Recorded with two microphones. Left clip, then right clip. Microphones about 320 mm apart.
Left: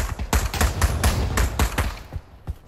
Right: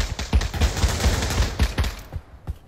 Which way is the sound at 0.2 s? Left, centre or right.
Right.